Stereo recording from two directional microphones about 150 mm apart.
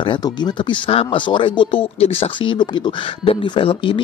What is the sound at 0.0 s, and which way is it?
Speech, 30° left (ahead or behind).